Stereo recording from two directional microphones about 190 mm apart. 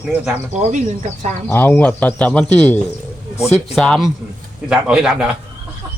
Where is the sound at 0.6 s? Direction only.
40° right (ahead or behind).